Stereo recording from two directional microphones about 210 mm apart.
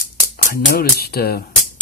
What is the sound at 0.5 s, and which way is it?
Speech, 45° left (ahead or behind).